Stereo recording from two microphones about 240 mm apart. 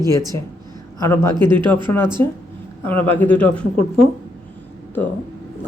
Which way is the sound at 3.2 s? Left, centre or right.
Centre.